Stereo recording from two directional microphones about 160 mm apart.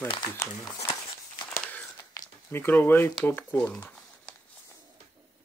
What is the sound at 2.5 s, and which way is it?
Speech, 15° left (ahead or behind).